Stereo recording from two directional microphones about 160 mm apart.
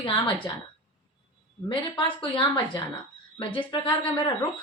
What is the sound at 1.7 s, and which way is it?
A woman's voice, 30° left (ahead or behind).